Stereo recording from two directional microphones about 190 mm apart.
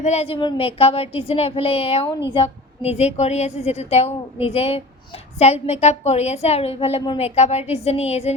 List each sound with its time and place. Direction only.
0.0 s a woman's voice: 35° left (ahead or behind)
7.3 s a woman's voice: 35° left (ahead or behind)